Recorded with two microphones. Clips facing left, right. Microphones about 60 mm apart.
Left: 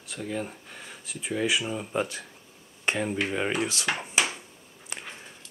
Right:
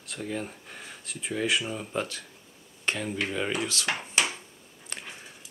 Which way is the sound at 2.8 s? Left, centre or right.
Left.